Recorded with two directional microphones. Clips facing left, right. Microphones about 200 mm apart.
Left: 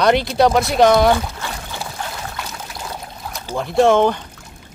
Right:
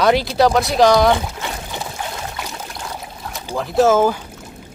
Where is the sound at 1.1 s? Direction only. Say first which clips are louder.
Even; 20° right (ahead or behind).